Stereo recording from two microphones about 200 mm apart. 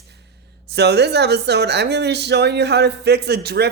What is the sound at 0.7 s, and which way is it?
Speech, 55° right (ahead or behind).